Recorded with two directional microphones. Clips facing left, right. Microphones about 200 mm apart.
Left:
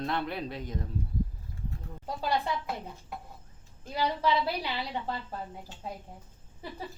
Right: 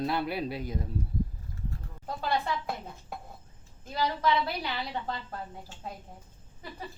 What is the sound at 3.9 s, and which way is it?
A woman's voice, 10° left (ahead or behind).